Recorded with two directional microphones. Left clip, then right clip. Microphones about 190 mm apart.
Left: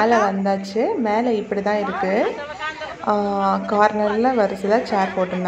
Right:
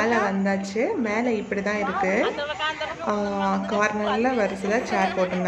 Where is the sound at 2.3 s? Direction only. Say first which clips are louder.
Right 1 dB; 40° right (ahead or behind).